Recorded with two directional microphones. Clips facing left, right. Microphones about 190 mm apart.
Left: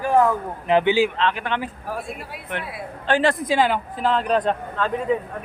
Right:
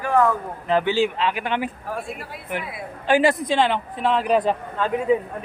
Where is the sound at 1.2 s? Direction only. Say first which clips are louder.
Even; 10° right (ahead or behind).